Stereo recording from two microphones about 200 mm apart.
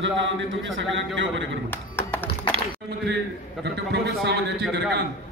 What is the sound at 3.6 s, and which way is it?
Speech, 55° right (ahead or behind).